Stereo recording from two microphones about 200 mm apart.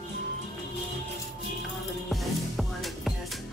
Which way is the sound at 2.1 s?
Centre (ahead or behind).